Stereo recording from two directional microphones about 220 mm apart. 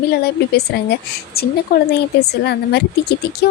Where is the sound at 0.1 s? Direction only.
45° left (ahead or behind).